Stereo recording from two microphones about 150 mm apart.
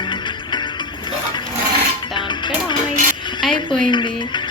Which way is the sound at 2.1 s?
30° left (ahead or behind).